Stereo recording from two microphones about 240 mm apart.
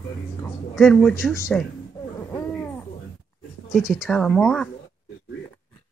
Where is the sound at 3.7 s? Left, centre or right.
Centre.